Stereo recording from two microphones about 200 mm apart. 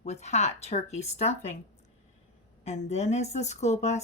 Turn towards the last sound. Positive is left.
turn(degrees=35)  # may be behind; listen again after turning